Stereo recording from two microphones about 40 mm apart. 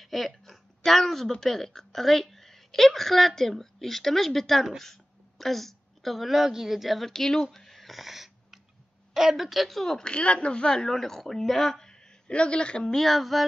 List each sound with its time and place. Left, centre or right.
0.0 s a sound: centre
1.4 s a woman's voice: centre
7.1 s a woman's voice: centre
7.5 s a sound: centre
9.1 s a woman's voice: centre
9.9 s speech: left
10.7 s a woman's voice: centre
11.8 s speech: left
12.9 s a woman's voice: centre